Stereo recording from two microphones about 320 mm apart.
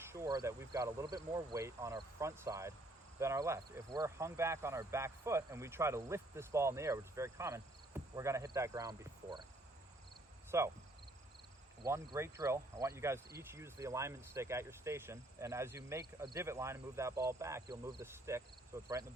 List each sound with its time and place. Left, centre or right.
0.0 s speech: centre
10.5 s speech: centre
11.8 s speech: centre